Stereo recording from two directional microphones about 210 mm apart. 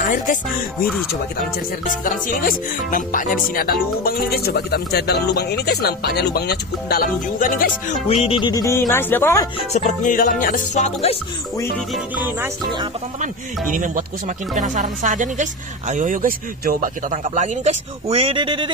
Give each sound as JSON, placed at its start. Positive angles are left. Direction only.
{"t": 0.7, "sound": "speech", "side_deg": 0}
{"t": 2.0, "sound": "speech", "side_deg": 40}
{"t": 8.2, "sound": "music", "side_deg": 25}
{"t": 8.9, "sound": "speech", "side_deg": 10}
{"t": 9.7, "sound": "music", "side_deg": 35}
{"t": 11.9, "sound": "music", "side_deg": -10}
{"t": 13.2, "sound": "speech", "side_deg": -40}